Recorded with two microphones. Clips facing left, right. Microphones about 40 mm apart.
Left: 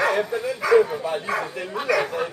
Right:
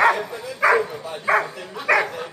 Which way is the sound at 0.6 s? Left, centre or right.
Right.